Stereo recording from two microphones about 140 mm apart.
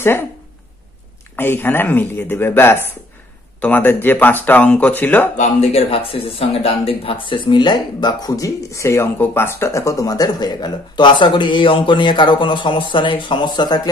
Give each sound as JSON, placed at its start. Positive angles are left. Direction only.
{"t": 1.3, "sound": "speech", "side_deg": 15}
{"t": 5.4, "sound": "speech", "side_deg": 50}